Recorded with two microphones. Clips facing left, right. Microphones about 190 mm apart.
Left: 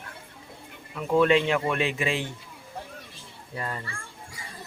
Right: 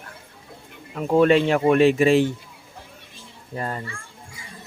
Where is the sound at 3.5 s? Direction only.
40° right (ahead or behind).